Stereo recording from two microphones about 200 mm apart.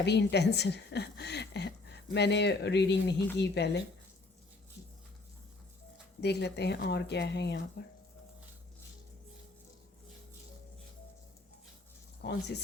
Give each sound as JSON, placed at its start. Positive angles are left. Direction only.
{"t": 0.0, "sound": "a woman's voice", "side_deg": 55}
{"t": 6.1, "sound": "a woman's voice", "side_deg": 55}
{"t": 12.2, "sound": "a woman's voice", "side_deg": 60}